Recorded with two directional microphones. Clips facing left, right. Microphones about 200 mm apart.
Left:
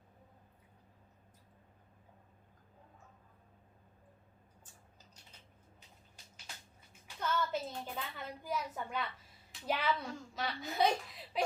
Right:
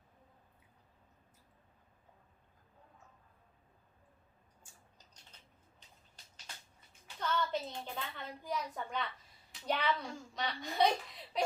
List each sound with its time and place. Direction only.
7.2 s a child's voice: 5° left (ahead or behind)